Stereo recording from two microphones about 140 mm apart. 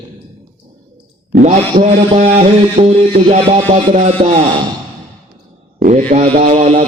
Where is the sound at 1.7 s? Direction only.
60° right (ahead or behind).